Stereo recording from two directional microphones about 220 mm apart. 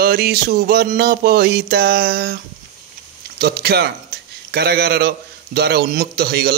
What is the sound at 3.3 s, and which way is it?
A man's voice, 45° right (ahead or behind).